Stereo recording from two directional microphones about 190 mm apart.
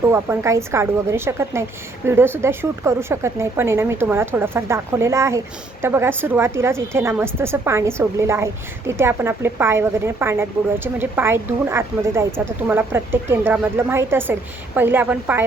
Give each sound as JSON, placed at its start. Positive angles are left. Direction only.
{"t": 0.1, "sound": "speech", "side_deg": -15}